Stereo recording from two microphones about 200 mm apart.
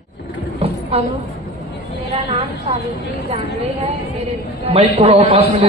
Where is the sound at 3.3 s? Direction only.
35° right (ahead or behind).